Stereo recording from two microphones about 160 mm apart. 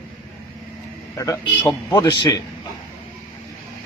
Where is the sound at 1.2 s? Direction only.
20° left (ahead or behind).